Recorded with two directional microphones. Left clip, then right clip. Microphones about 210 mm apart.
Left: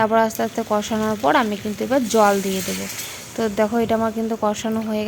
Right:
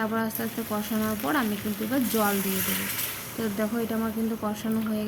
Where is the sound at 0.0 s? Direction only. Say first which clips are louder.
Left 12 dB; 35° left (ahead or behind).